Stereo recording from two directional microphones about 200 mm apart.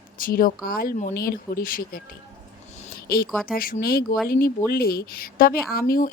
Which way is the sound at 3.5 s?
45° left (ahead or behind).